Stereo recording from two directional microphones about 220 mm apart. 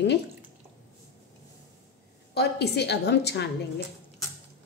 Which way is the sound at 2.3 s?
50° left (ahead or behind).